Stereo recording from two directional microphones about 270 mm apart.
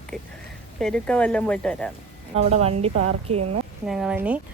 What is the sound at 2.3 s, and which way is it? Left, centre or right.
A woman's voice, right.